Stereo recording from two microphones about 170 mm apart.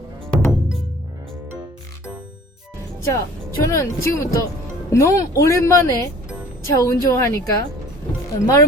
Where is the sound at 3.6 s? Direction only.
15° left (ahead or behind).